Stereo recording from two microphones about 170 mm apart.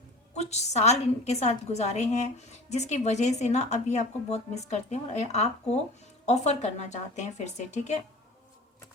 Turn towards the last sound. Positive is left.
turn(degrees=45)  # may be behind; listen again after turning